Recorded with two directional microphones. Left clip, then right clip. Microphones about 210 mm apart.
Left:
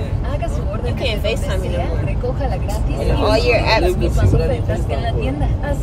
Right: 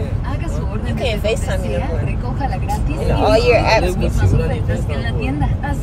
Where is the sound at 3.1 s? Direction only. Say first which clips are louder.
Right 3 dB; 5° right (ahead or behind).